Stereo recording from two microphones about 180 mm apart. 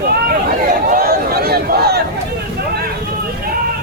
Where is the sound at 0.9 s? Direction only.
55° right (ahead or behind).